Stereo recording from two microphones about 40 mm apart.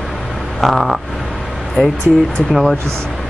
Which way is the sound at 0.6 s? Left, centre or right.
Centre.